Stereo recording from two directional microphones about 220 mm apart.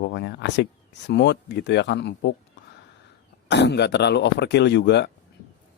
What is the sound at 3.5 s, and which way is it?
Speech, 50° left (ahead or behind).